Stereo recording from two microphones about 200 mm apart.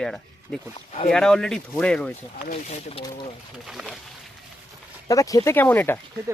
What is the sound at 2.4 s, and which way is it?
Speech, 40° left (ahead or behind).